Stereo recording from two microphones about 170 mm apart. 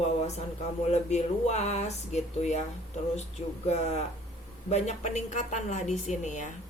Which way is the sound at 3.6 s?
40° left (ahead or behind).